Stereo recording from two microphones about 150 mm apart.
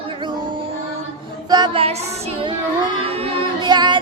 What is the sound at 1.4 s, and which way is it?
Female singing, 30° right (ahead or behind).